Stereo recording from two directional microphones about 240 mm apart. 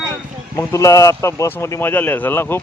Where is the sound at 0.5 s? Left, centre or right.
Centre.